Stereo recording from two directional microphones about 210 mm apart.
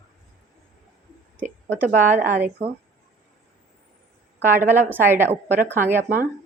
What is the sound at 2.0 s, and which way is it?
Speech, 10° right (ahead or behind).